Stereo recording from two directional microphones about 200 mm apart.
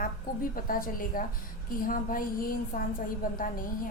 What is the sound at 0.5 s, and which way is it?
Speech, 45° left (ahead or behind).